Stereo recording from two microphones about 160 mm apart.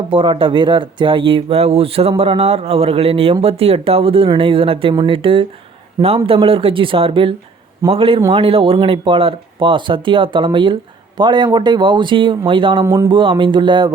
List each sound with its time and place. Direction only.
0.1 s speech: 35° right (ahead or behind)
12.8 s speech: 15° right (ahead or behind)
13.1 s speech: 30° right (ahead or behind)